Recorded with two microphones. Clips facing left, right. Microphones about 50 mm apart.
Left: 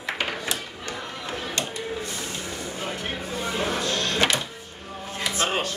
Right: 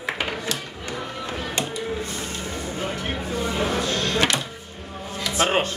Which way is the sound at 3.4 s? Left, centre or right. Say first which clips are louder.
Right 2 dB; centre.